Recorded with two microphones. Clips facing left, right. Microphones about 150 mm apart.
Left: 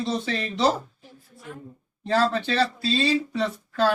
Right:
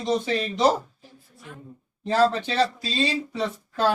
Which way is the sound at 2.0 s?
15° right (ahead or behind).